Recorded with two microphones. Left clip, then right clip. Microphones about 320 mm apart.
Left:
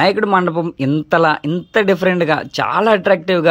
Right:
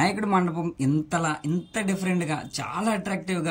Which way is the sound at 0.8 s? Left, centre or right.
Left.